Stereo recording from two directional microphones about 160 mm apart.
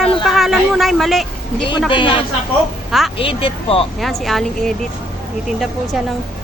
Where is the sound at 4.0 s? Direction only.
Centre (ahead or behind).